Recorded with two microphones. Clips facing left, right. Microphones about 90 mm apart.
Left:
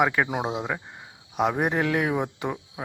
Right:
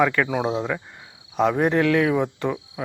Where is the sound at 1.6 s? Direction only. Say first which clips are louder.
Right 5 dB; 20° left (ahead or behind).